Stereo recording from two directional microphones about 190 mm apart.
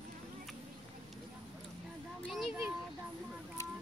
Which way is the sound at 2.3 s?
Centre (ahead or behind).